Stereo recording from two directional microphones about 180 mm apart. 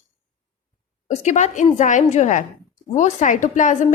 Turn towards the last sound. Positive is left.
turn(degrees=45)  # may be behind; listen again after turning